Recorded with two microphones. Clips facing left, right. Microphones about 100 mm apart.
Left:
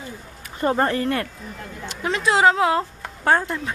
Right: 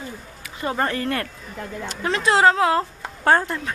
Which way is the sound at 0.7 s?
20° left (ahead or behind).